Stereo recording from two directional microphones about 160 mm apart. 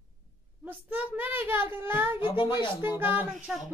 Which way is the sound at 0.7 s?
10° right (ahead or behind).